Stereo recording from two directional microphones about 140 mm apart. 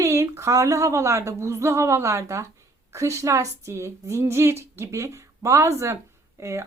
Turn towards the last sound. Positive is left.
turn(degrees=-20)  # may be behind; listen again after turning